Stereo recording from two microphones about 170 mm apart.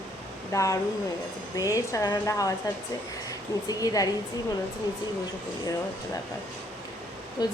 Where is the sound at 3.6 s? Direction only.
20° left (ahead or behind).